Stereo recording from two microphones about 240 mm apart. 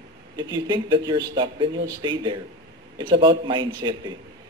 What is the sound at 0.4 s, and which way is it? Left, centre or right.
A man's voice, centre.